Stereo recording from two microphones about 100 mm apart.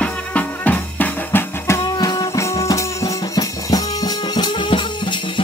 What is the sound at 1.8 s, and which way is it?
Music, 45° left (ahead or behind).